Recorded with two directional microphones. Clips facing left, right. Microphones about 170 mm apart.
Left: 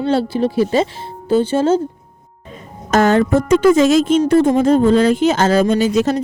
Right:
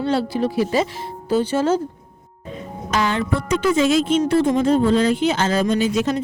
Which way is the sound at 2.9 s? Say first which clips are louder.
Left 8 dB; 45° left (ahead or behind).